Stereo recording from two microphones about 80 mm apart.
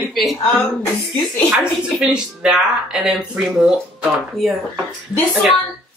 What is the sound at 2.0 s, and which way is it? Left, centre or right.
Speech, centre.